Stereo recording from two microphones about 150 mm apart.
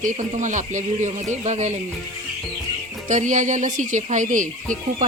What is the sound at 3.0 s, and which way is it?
Speech, 55° right (ahead or behind).